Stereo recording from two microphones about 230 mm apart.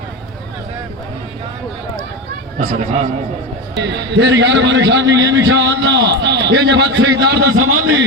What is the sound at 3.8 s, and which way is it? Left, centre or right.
A man's voice, right.